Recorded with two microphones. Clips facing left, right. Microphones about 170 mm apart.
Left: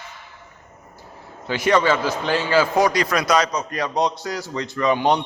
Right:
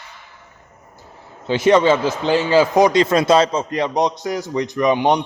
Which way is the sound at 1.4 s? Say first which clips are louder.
Right 5 dB; 20° right (ahead or behind).